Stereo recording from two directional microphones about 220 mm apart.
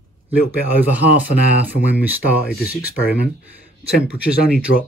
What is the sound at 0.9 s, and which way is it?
Speech, 5° right (ahead or behind).